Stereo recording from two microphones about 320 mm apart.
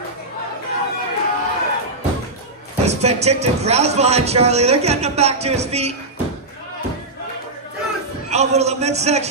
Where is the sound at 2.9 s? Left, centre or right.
Centre.